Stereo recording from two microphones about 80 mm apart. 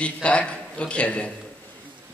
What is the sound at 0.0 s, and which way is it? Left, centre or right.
A man's voice, centre.